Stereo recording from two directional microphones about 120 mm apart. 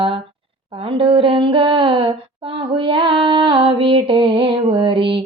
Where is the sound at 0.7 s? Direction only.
50° right (ahead or behind).